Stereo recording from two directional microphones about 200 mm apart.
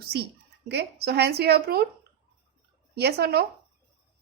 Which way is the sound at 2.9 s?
55° right (ahead or behind).